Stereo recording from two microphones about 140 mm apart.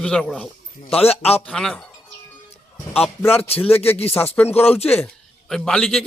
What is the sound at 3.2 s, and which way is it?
Speech, 15° left (ahead or behind).